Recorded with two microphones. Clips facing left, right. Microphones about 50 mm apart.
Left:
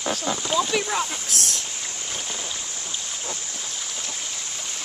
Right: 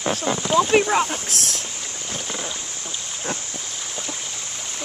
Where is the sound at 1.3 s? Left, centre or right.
Right.